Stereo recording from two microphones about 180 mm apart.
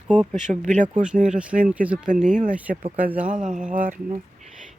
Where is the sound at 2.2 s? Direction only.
45° right (ahead or behind).